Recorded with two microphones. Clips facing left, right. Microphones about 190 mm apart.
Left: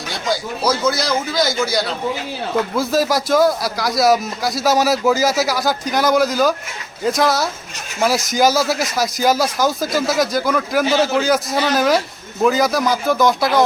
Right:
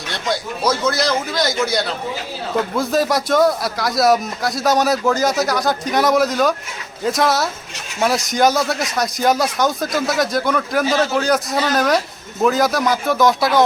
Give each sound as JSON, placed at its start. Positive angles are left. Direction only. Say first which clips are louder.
{"t": 0.1, "sound": "speech", "louder": "left 1 dB", "side_deg": 0}